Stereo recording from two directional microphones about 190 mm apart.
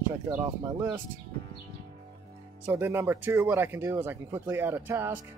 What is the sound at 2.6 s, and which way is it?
Speech, 10° right (ahead or behind).